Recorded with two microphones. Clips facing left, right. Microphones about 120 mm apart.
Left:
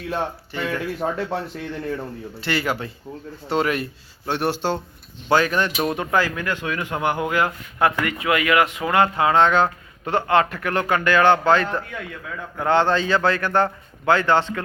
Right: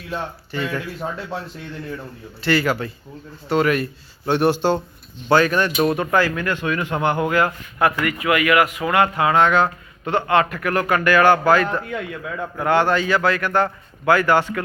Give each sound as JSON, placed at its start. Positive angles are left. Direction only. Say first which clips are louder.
{"t": 0.5, "sound": "speech", "louder": "right 3 dB", "side_deg": 20}
{"t": 0.9, "sound": "speech", "louder": "left 3 dB", "side_deg": 55}
{"t": 2.4, "sound": "speech", "louder": "right 5 dB", "side_deg": 20}
{"t": 4.3, "sound": "speech", "louder": "right 5 dB", "side_deg": 0}
{"t": 5.3, "sound": "speech", "louder": "right 2 dB", "side_deg": 15}